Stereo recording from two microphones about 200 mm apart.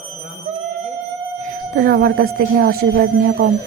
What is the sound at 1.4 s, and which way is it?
Speech, 50° right (ahead or behind).